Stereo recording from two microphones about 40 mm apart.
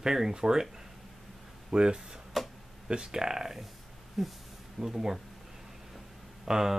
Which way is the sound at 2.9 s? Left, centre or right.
Centre.